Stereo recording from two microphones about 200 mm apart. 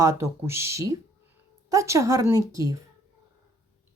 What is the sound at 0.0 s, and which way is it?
A woman's voice, 15° right (ahead or behind).